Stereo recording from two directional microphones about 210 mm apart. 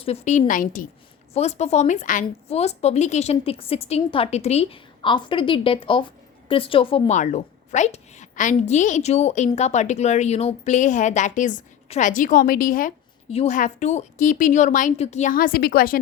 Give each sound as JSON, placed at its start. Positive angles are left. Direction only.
{"t": 0.0, "sound": "a woman's voice", "side_deg": 30}